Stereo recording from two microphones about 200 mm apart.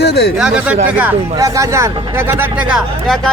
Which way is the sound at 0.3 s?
5° right (ahead or behind).